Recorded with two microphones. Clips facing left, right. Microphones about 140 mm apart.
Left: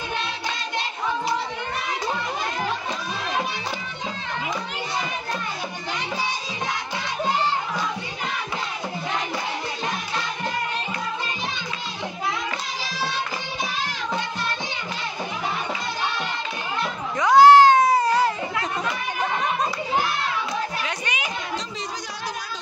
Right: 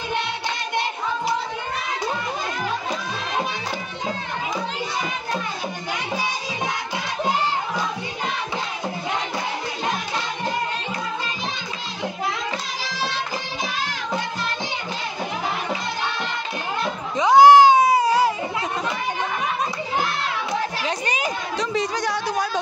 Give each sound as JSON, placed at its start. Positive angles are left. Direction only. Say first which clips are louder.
{"t": 17.2, "sound": "cat", "louder": "right 1 dB", "side_deg": -20}
{"t": 20.8, "sound": "children playing", "louder": "right 4 dB", "side_deg": -40}
{"t": 21.5, "sound": "music", "louder": "right 8 dB", "side_deg": -70}